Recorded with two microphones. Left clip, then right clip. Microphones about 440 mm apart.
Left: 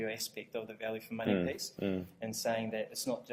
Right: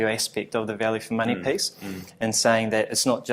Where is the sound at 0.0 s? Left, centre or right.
Right.